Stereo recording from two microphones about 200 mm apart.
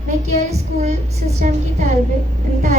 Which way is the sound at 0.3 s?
35° right (ahead or behind).